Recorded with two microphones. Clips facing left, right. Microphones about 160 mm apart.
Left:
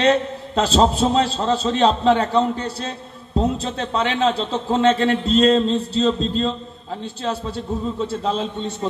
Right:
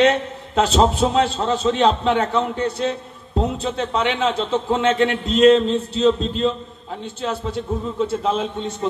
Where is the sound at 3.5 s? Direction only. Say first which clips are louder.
Right 1 dB; 35° left (ahead or behind).